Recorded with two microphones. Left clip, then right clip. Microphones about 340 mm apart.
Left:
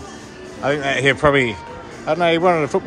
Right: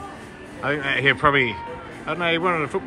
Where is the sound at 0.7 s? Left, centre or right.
Centre.